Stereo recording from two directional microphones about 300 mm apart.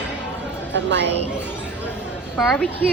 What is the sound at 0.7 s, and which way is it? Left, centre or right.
Speech, right.